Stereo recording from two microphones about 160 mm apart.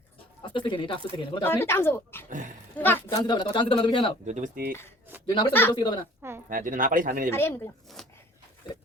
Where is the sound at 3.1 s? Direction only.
25° left (ahead or behind).